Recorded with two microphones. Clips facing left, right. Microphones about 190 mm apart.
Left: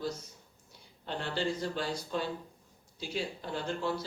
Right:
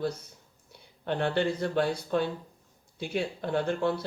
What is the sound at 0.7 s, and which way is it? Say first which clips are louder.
Speech: right 7 dB; 60° right (ahead or behind).